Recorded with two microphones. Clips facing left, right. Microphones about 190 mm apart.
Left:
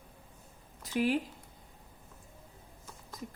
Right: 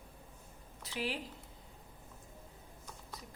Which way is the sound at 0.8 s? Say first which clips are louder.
Left 9 dB; 50° left (ahead or behind).